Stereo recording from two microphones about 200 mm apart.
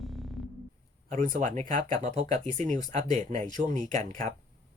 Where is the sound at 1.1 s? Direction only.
40° right (ahead or behind).